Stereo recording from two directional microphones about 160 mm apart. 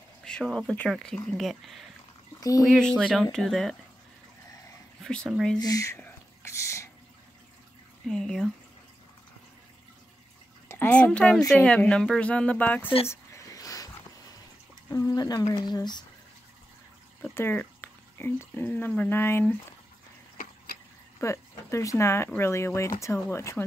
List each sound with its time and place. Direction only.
0.2 s speech: 5° left (ahead or behind)
5.0 s speech: 5° left (ahead or behind)
5.6 s whispering: 20° left (ahead or behind)
8.1 s speech: 5° left (ahead or behind)
10.7 s a child's voice: 10° left (ahead or behind)
13.1 s a sound: 20° left (ahead or behind)
14.9 s speech: 20° left (ahead or behind)
17.2 s speech: 15° left (ahead or behind)
21.2 s speech: 15° left (ahead or behind)